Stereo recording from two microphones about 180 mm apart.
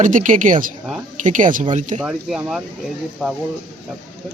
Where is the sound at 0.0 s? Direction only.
45° right (ahead or behind).